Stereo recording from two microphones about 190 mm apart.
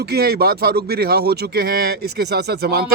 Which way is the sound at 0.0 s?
55° right (ahead or behind).